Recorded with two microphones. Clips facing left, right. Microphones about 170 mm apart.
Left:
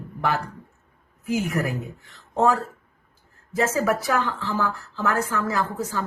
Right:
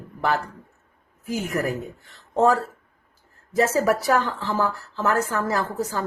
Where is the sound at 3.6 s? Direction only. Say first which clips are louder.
Right 2 dB; 35° right (ahead or behind).